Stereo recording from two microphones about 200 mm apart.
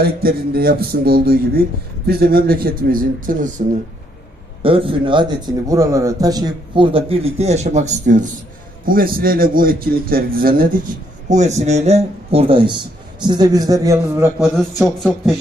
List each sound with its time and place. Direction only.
0.0 s a man's voice: 50° right (ahead or behind)
4.6 s a man's voice: 25° right (ahead or behind); by 10.7 s 45° right (ahead or behind)
11.3 s speech: 35° right (ahead or behind); by 14.3 s 15° right (ahead or behind)
14.4 s a man's voice: centre (ahead or behind)